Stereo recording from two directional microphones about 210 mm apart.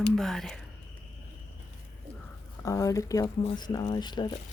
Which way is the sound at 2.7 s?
15° left (ahead or behind).